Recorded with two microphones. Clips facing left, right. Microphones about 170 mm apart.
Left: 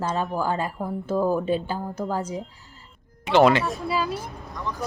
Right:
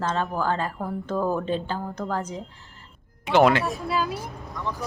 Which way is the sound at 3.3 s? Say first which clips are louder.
Left 1 dB; 10° right (ahead or behind).